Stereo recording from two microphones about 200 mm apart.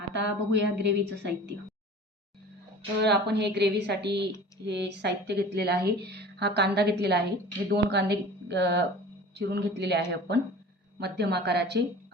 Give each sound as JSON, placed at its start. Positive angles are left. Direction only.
{"t": 0.1, "sound": "speech", "side_deg": -60}
{"t": 3.0, "sound": "speech", "side_deg": -55}